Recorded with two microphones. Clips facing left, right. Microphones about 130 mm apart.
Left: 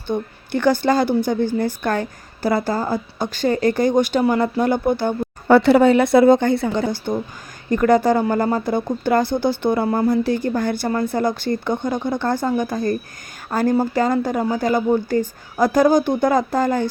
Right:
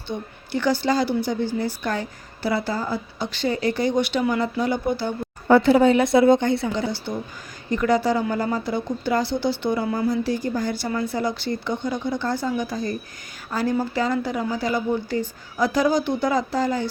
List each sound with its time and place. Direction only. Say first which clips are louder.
0.1 s a woman's voice: left 5 dB; 50° left (ahead or behind)
5.5 s a woman's voice: left 3 dB; 75° left (ahead or behind); by 10.1 s 40° left (ahead or behind)
10.1 s a woman's voice: left 4 dB; 60° left (ahead or behind)